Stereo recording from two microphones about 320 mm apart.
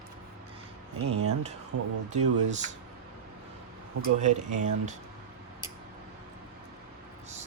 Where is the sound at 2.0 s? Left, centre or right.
Right.